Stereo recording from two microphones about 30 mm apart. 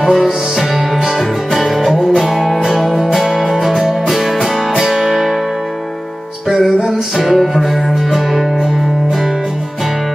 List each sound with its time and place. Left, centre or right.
0.1 s music: centre
6.6 s music: centre
7.2 s music: centre